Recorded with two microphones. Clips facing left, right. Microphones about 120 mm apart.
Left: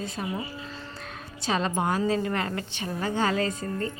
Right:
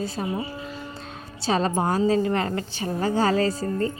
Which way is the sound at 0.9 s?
30° right (ahead or behind).